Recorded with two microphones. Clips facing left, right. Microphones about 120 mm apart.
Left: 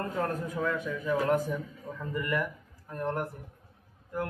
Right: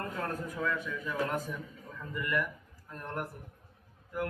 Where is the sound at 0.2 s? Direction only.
25° left (ahead or behind).